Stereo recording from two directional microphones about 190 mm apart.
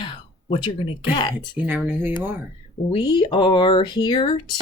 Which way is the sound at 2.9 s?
25° left (ahead or behind).